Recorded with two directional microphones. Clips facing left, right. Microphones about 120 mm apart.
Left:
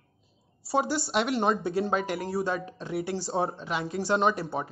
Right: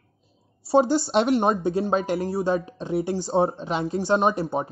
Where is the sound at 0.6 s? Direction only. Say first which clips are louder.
Right 8 dB; 25° right (ahead or behind).